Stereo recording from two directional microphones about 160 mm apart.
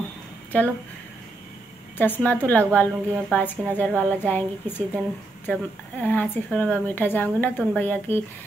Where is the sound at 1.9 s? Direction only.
10° left (ahead or behind).